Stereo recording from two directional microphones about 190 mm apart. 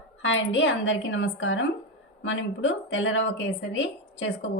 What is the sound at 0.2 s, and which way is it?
A woman's voice, 80° left.